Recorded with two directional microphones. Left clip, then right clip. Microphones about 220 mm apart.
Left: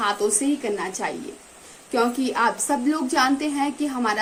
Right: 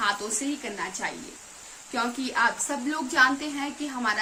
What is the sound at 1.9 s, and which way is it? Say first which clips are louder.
A woman's voice: left 6 dB; 15° right (ahead or behind).